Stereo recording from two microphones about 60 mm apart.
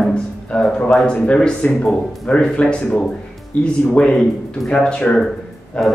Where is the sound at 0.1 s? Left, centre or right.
Centre.